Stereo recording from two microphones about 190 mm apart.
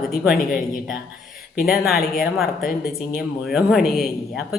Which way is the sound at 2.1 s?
Centre (ahead or behind).